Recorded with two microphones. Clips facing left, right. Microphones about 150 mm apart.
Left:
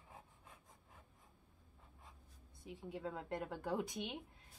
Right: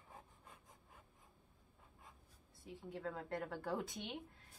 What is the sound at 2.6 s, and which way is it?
Speech, 20° left (ahead or behind).